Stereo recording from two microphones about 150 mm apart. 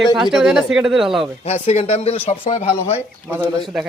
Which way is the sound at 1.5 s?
45° left (ahead or behind).